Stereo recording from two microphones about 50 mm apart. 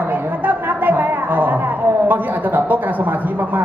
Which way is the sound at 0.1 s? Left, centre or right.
Right.